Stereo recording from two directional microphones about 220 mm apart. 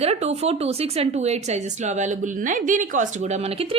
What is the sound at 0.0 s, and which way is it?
Speech, 30° right (ahead or behind).